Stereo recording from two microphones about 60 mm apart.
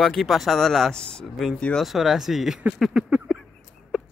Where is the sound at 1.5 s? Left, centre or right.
Centre.